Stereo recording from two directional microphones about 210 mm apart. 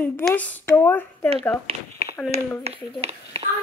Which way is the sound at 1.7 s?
25° right (ahead or behind).